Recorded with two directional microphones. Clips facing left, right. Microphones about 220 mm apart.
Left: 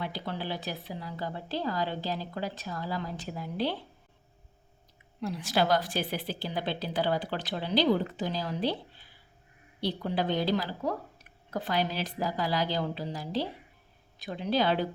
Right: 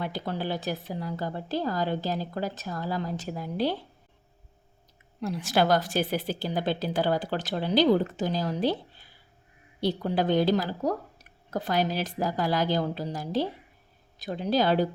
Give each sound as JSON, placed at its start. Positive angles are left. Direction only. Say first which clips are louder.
{"t": 0.0, "sound": "a woman's voice", "louder": "right 4 dB", "side_deg": -45}
{"t": 5.2, "sound": "a woman's voice", "louder": "right 3 dB", "side_deg": -50}
{"t": 9.8, "sound": "a woman's voice", "louder": "right 4 dB", "side_deg": -45}